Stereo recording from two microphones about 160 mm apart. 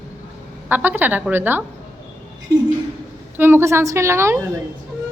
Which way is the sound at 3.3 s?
15° right (ahead or behind).